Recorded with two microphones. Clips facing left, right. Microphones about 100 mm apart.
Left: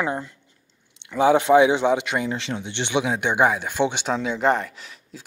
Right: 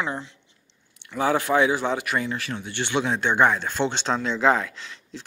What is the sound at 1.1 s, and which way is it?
Speech, 20° left (ahead or behind).